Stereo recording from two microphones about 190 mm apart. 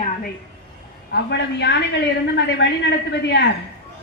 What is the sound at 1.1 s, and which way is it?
A woman's voice, 65° left (ahead or behind).